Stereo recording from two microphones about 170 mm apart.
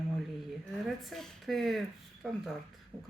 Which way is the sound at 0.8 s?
Centre (ahead or behind).